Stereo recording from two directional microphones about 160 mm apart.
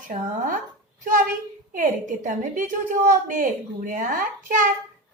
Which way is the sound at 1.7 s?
55° right (ahead or behind).